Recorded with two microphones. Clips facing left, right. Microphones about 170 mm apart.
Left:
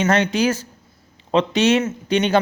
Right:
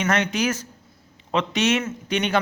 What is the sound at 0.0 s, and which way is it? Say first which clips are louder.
Speech: left 5 dB; 30° left (ahead or behind).